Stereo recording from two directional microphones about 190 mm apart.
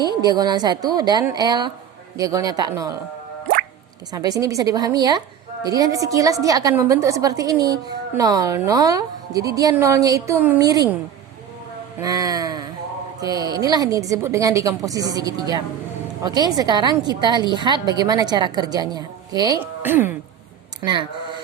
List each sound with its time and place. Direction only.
0.0 s a woman's voice: 20° right (ahead or behind)
4.1 s a woman's voice: 20° right (ahead or behind)
11.9 s a woman's voice: 20° right (ahead or behind)
19.8 s a woman's voice: 10° right (ahead or behind)
20.8 s a woman's voice: 25° right (ahead or behind)